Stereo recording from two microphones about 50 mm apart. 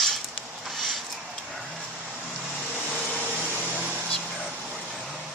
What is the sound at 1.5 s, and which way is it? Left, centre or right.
Vehicle, centre.